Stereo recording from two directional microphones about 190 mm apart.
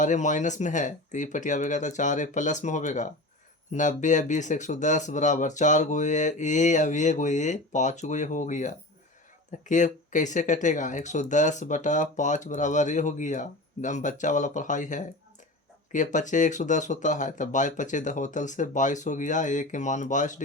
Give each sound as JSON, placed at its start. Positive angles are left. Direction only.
{"t": 0.0, "sound": "speech", "side_deg": 40}